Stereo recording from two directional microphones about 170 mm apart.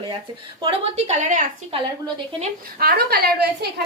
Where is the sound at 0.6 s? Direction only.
40° right (ahead or behind).